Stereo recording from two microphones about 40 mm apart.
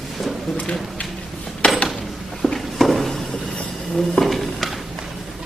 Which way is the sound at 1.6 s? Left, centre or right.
Left.